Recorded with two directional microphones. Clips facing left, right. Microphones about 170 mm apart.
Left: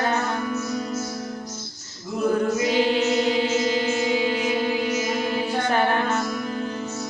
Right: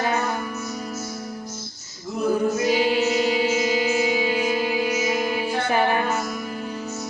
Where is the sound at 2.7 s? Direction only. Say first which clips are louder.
Even; 10° right (ahead or behind).